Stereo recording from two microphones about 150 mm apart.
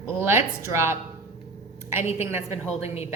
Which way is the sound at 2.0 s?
15° right (ahead or behind).